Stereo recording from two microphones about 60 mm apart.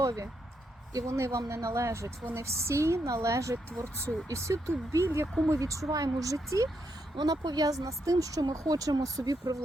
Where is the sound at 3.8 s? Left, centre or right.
Right.